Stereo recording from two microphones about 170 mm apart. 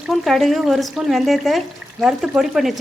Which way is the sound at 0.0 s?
Centre (ahead or behind).